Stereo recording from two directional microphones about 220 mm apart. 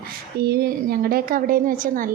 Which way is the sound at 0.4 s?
45° right (ahead or behind).